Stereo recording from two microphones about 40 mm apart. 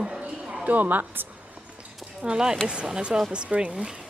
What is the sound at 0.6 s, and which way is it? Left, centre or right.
Speech, right.